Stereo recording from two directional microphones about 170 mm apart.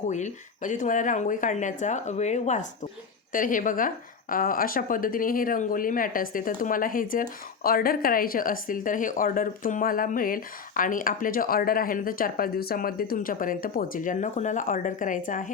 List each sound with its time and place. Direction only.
0.1 s a woman's voice: 45° left (ahead or behind)